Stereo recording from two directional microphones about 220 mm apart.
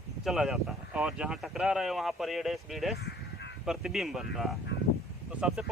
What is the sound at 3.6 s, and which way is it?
Speech, 5° right (ahead or behind).